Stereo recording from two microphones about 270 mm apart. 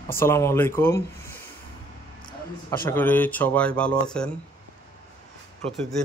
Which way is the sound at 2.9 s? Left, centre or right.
Centre.